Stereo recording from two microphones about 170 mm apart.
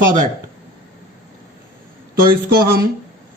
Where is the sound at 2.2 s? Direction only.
60° right (ahead or behind).